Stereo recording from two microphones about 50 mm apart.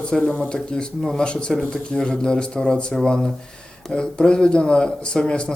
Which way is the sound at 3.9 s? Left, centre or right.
Centre.